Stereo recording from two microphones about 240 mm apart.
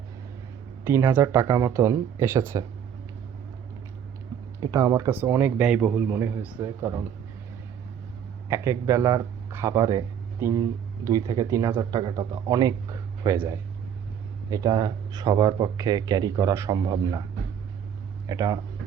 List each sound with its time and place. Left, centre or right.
0.9 s speech: centre
4.6 s speech: centre
8.4 s speech: centre
18.3 s speech: centre